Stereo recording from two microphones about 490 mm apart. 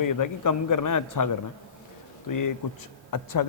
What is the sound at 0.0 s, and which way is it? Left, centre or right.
A man's voice, left.